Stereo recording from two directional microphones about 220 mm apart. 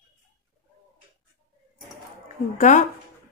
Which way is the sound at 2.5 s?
35° left (ahead or behind).